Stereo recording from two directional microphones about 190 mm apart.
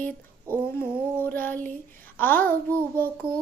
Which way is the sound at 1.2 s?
10° left (ahead or behind).